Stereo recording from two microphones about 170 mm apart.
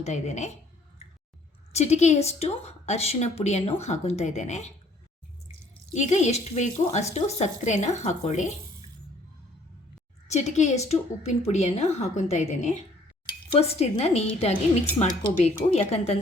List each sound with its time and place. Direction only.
0.0 s speech: 45° left (ahead or behind)
1.7 s a woman's voice: 40° left (ahead or behind)
5.9 s speech: 45° left (ahead or behind)
10.2 s a woman's voice: 40° left (ahead or behind)